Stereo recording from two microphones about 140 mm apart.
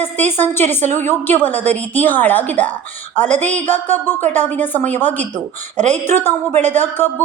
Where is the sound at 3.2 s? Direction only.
55° right (ahead or behind).